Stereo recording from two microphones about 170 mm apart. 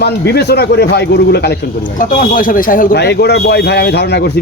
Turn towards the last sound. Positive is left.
turn(degrees=75)  # may be behind; listen again after turning